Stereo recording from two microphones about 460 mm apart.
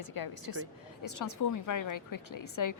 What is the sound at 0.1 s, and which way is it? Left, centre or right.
A woman's voice, left.